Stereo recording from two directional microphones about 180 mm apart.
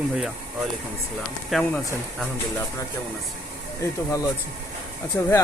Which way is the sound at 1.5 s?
5° left (ahead or behind).